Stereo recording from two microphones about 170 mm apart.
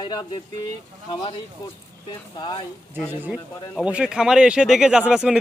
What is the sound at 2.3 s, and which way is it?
Speech, 25° left (ahead or behind).